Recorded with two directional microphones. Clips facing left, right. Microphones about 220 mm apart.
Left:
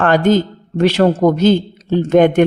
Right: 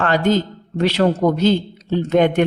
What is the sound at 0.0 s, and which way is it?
Speech, 50° left (ahead or behind).